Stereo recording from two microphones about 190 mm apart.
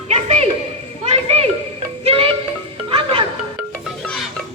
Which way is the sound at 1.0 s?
35° right (ahead or behind).